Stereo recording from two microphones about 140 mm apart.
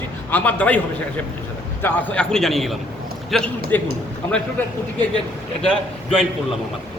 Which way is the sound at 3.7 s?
15° left (ahead or behind).